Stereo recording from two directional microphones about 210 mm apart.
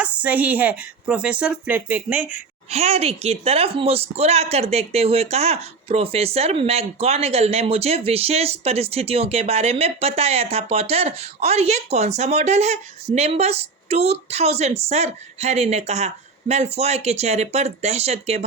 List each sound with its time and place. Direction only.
0.0 s a woman's voice: 5° right (ahead or behind)
2.6 s speech: 30° right (ahead or behind)